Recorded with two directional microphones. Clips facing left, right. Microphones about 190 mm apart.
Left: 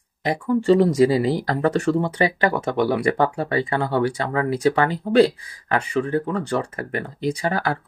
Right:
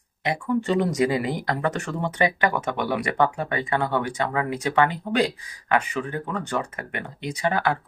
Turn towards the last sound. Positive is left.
turn(degrees=35)  # may be behind; listen again after turning